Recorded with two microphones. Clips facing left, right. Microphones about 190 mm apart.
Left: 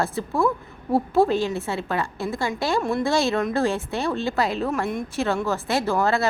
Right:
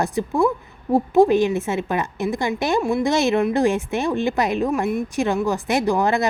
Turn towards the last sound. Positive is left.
turn(degrees=-15)  # may be behind; listen again after turning